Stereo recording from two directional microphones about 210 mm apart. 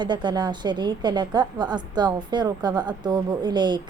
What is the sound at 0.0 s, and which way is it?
Speech, 20° right (ahead or behind).